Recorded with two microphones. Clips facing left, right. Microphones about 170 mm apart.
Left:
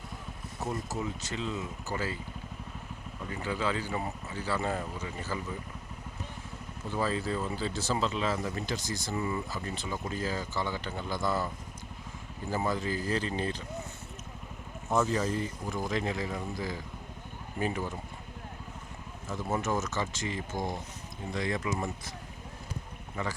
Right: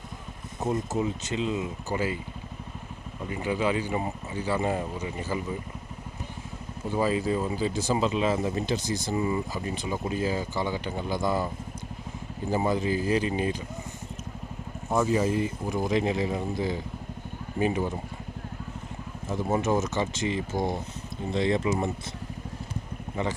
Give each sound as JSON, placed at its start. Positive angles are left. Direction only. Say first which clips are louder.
{"t": 0.6, "sound": "speech", "louder": "right 7 dB", "side_deg": -20}
{"t": 3.2, "sound": "speech", "louder": "right 5 dB", "side_deg": -15}
{"t": 6.8, "sound": "speech", "louder": "right 6 dB", "side_deg": -15}
{"t": 14.8, "sound": "speech", "louder": "right 4 dB", "side_deg": -10}
{"t": 19.3, "sound": "speech", "louder": "right 6 dB", "side_deg": -20}